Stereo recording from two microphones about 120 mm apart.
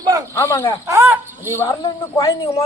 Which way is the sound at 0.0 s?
30° right (ahead or behind).